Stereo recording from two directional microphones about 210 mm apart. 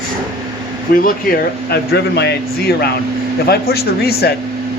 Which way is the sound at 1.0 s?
45° left (ahead or behind).